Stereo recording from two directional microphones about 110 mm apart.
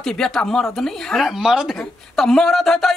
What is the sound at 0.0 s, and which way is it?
A woman's voice, 5° left (ahead or behind).